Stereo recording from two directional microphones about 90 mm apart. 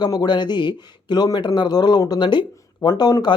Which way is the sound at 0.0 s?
50° left (ahead or behind).